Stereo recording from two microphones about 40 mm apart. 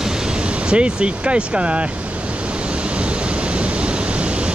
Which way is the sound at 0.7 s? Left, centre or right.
Right.